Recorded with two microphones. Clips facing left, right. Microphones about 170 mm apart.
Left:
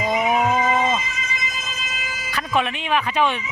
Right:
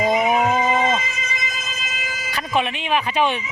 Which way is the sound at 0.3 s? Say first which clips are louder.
Right 1 dB; 30° right (ahead or behind).